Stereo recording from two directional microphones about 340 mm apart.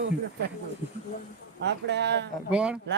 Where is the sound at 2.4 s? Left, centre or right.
Centre.